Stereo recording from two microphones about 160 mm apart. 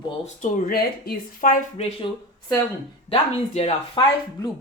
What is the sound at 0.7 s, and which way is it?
Speech, 65° left (ahead or behind).